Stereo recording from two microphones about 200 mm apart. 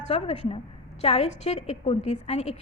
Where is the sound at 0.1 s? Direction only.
30° left (ahead or behind).